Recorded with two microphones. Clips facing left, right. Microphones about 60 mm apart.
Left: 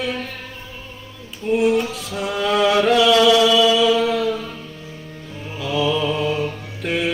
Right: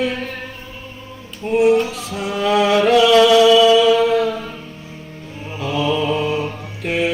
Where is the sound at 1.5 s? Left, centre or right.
Right.